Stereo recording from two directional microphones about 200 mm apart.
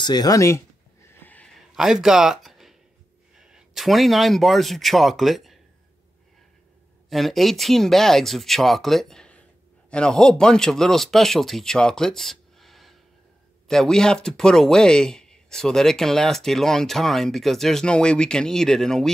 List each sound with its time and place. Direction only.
0.0 s speech: 20° left (ahead or behind)
1.0 s a sound: 10° left (ahead or behind)
3.3 s speech: centre (ahead or behind)
7.1 s speech: centre (ahead or behind)